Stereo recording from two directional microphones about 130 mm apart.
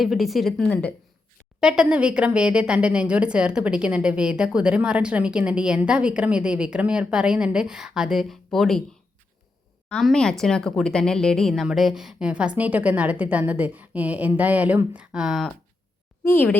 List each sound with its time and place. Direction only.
0.0 s a woman's voice: centre (ahead or behind)
0.7 s speech: 10° left (ahead or behind)
1.6 s a woman's voice: 5° right (ahead or behind)
9.9 s a woman's voice: 5° left (ahead or behind)
16.2 s speech: 20° left (ahead or behind)